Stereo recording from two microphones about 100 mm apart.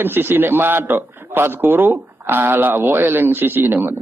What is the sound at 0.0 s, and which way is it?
A man's voice, 20° right (ahead or behind).